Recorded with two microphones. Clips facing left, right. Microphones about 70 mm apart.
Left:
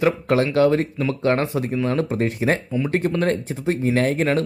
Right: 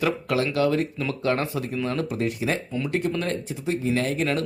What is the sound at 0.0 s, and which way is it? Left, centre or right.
Speech, left.